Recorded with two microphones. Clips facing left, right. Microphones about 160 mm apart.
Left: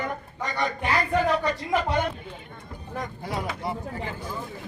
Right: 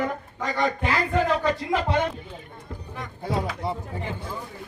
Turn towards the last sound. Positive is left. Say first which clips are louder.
# right 3 dB
turn(degrees=-25)  # may be behind; listen again after turning